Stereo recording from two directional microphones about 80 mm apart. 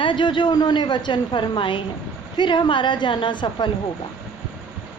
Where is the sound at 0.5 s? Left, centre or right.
Left.